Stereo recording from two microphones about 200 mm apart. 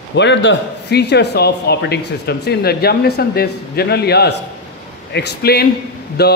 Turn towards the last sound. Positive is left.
turn(degrees=55)  # may be behind; listen again after turning